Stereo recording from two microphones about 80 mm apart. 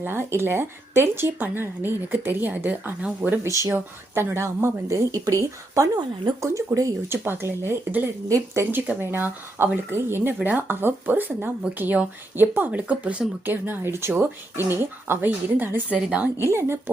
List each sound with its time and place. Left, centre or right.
0.0 s speech: right
3.6 s a woman's voice: right
7.1 s a woman's voice: right
16.0 s a woman's voice: centre
16.4 s a woman's voice: right